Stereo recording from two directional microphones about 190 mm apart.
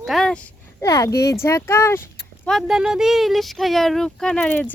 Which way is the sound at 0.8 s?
15° left (ahead or behind).